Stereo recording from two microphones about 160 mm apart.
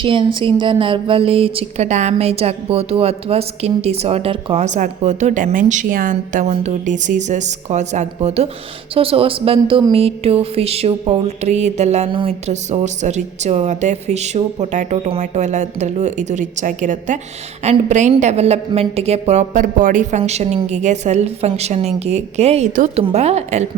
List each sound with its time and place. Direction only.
0.0 s speech: 30° right (ahead or behind)